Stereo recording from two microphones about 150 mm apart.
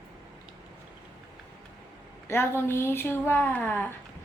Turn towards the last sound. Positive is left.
turn(degrees=10)  # may be behind; listen again after turning